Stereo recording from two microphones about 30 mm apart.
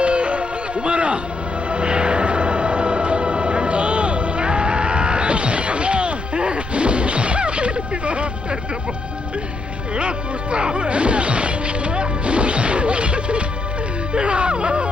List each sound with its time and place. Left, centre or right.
0.0 s music: right
9.9 s music: right